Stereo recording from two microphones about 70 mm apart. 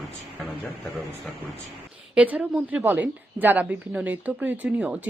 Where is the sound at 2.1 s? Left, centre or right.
Centre.